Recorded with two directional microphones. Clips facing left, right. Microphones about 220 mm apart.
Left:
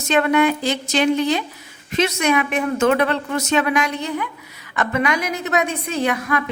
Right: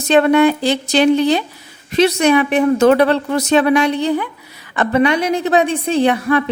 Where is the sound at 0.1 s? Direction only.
30° right (ahead or behind).